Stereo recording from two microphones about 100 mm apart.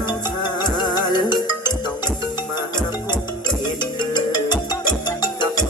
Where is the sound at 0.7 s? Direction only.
45° left (ahead or behind).